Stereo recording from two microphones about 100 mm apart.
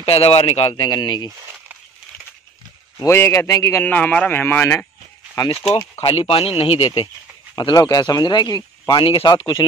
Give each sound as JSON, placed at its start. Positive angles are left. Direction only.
{"t": 0.0, "sound": "speech", "side_deg": 70}
{"t": 0.7, "sound": "speech", "side_deg": 45}
{"t": 3.1, "sound": "speech", "side_deg": 25}
{"t": 3.8, "sound": "speech", "side_deg": 15}
{"t": 5.7, "sound": "speech", "side_deg": 90}
{"t": 7.5, "sound": "speech", "side_deg": 40}